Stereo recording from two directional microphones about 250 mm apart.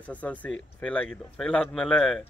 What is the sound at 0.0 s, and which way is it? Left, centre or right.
Speech, centre.